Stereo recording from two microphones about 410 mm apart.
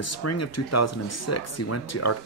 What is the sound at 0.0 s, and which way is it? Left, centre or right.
Speech, left.